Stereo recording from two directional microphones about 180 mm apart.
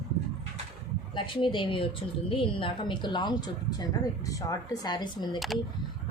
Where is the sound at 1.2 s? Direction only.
25° left (ahead or behind).